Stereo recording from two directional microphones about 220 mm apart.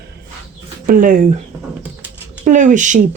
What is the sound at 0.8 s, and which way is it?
Speech, 40° right (ahead or behind).